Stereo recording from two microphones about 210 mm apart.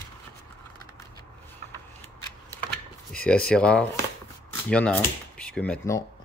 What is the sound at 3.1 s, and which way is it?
Speech, 5° left (ahead or behind).